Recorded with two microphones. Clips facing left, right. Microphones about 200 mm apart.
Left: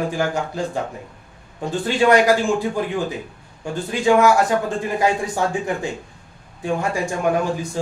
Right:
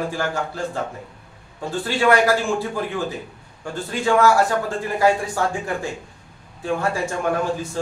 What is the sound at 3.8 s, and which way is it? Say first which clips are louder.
A man's voice: left 2 dB; 20° left (ahead or behind).